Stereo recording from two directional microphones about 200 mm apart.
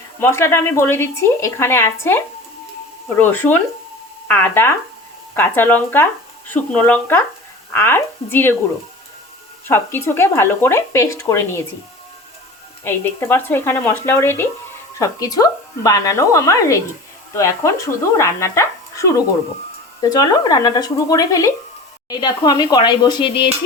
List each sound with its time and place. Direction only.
0.2 s a woman's voice: 10° left (ahead or behind)
9.6 s a woman's voice: 10° left (ahead or behind)
12.8 s a woman's voice: 10° left (ahead or behind)